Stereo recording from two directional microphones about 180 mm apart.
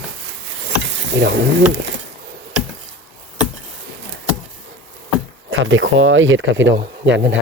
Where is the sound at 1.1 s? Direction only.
80° right.